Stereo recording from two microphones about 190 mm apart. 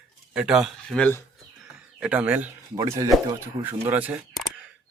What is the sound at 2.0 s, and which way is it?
Speech, 5° right (ahead or behind).